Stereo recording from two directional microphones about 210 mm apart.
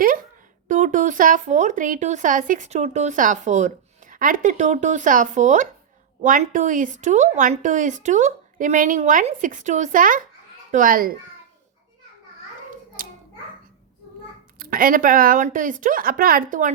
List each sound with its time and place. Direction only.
0.7 s speech: 35° right (ahead or behind)
14.6 s speech: 40° right (ahead or behind)